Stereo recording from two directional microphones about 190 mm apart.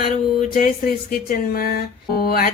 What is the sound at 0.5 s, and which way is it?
A woman's voice, 45° left (ahead or behind).